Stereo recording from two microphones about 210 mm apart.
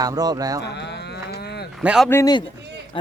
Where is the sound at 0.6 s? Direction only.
55° left (ahead or behind).